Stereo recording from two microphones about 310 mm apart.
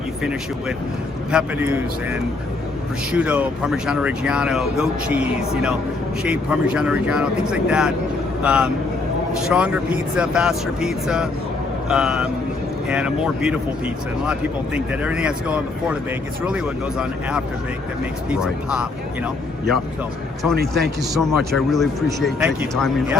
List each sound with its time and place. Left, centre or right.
1.3 s speech: centre
20.6 s speech: right
21.2 s speech: centre